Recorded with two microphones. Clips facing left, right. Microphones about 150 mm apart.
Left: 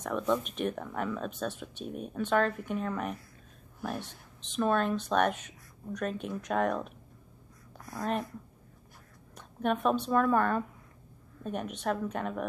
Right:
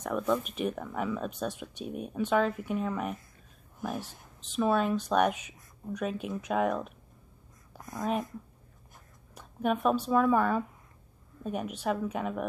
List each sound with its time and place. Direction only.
0.0 s speech: 5° right (ahead or behind)
4.6 s speech: 5° right (ahead or behind)
7.7 s a sound: 20° right (ahead or behind)
8.0 s speech: centre (ahead or behind)
9.3 s speech: 5° right (ahead or behind)